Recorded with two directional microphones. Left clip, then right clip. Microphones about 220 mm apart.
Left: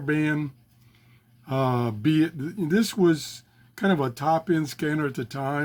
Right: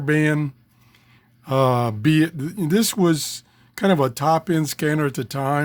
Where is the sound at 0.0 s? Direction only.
50° right (ahead or behind).